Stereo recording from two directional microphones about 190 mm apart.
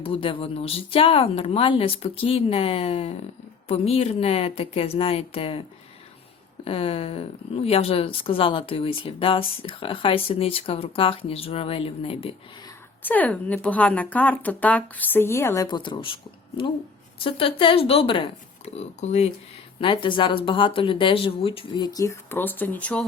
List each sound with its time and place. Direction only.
0.0 s a woman's voice: 30° left (ahead or behind)
6.7 s a woman's voice: 30° left (ahead or behind)
13.0 s speech: 10° left (ahead or behind); by 16.1 s 25° left (ahead or behind)
17.2 s a woman's voice: 30° left (ahead or behind); by 23.0 s 5° left (ahead or behind)